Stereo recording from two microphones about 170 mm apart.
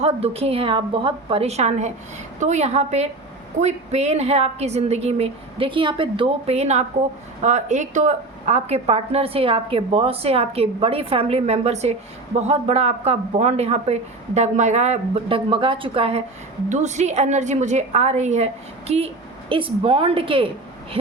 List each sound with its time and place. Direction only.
0.0 s a woman's voice: 35° right (ahead or behind)